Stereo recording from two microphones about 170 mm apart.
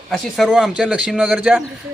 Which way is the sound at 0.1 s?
Centre (ahead or behind).